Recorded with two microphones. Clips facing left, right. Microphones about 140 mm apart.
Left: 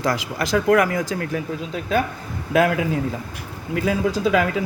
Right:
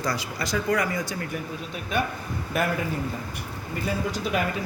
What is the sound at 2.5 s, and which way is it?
Speech, 90° left.